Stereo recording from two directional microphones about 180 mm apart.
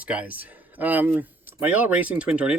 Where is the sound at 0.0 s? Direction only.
5° right (ahead or behind).